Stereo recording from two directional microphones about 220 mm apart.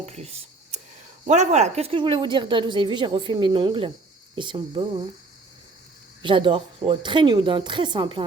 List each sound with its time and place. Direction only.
0.0 s a sound: 30° right (ahead or behind)
1.2 s a woman's voice: 30° right (ahead or behind)
6.2 s a woman's voice: 20° right (ahead or behind)